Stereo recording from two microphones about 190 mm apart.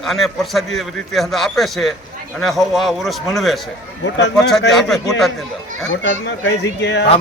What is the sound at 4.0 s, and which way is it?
Speech, 65° left (ahead or behind).